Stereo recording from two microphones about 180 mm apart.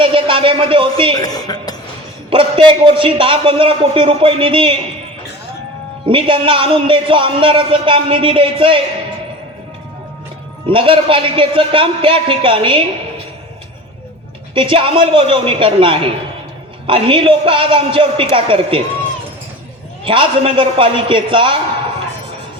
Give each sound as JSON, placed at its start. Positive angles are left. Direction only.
{"t": 0.0, "sound": "a man's voice", "side_deg": -30}
{"t": 1.2, "sound": "a woman's voice", "side_deg": 20}
{"t": 2.3, "sound": "a man's voice", "side_deg": -30}
{"t": 6.1, "sound": "a man's voice", "side_deg": -30}
{"t": 10.7, "sound": "a man's voice", "side_deg": -30}
{"t": 14.5, "sound": "a man's voice", "side_deg": -30}
{"t": 20.1, "sound": "a man's voice", "side_deg": -30}